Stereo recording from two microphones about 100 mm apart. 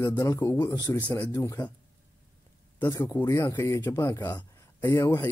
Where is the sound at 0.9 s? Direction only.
20° left (ahead or behind).